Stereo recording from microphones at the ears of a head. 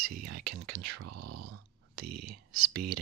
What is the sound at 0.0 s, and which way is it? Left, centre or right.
Speech, right.